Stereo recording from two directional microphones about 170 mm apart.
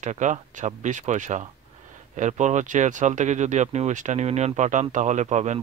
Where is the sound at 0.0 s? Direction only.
45° right (ahead or behind).